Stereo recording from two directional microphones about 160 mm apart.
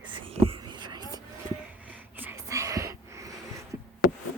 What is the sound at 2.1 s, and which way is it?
Whispering, 15° right (ahead or behind).